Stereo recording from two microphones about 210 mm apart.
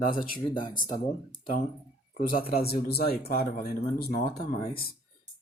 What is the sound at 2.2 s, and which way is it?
Speech, 45° left (ahead or behind).